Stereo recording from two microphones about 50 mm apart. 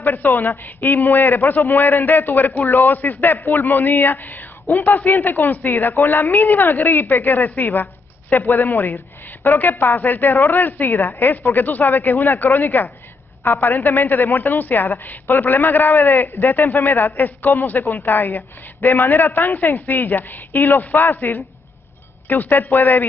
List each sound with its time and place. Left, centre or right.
0.3 s a woman's voice: left
3.3 s speech: left
3.6 s speech: left
4.7 s a woman's voice: left
7.6 s a sound: left
9.4 s a woman's voice: left
18.2 s a woman's voice: left
22.6 s a woman's voice: left